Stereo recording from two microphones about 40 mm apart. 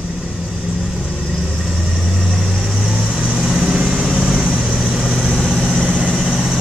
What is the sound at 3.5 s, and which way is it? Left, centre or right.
Vehicle, right.